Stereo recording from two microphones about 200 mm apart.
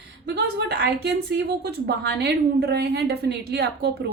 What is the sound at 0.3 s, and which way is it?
A woman's voice, 55° right (ahead or behind).